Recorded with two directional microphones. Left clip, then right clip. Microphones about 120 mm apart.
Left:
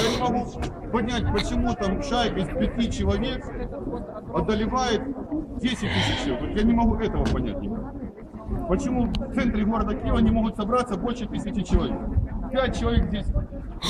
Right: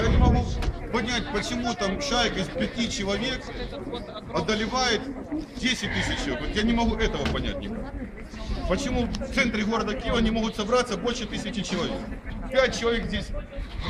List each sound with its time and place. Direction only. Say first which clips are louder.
0.0 s a sound: left 2 dB; 25° left (ahead or behind)
0.9 s speech: left 1 dB; 20° left (ahead or behind)
4.4 s a man's voice: left 1 dB; 15° left (ahead or behind)
5.9 s speech: left 3 dB; 45° left (ahead or behind)
6.5 s speech: left 2 dB; centre (ahead or behind); by 7.5 s 20° right (ahead or behind)
8.7 s a man's voice: left 1 dB; 15° right (ahead or behind)